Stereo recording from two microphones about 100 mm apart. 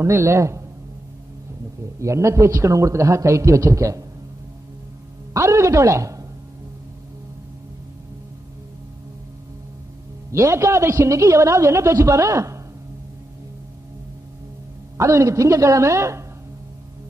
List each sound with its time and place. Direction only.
0.0 s a woman's voice: 25° right (ahead or behind)
2.0 s a man's voice: 30° right (ahead or behind)
5.3 s speech: 30° right (ahead or behind)
10.3 s a woman's voice: 30° right (ahead or behind)
15.0 s a man's voice: 30° right (ahead or behind)